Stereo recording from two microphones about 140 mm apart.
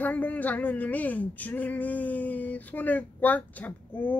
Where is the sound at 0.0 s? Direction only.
10° left (ahead or behind).